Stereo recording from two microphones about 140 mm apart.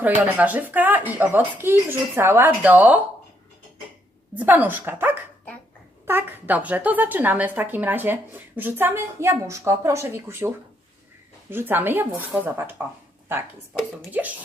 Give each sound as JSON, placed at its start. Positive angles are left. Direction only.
{"t": 0.2, "sound": "a woman's voice", "side_deg": -10}
{"t": 4.4, "sound": "a woman's voice", "side_deg": -15}
{"t": 14.1, "sound": "a woman's voice", "side_deg": -10}